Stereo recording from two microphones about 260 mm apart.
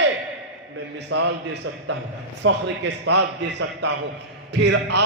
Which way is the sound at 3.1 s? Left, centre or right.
Right.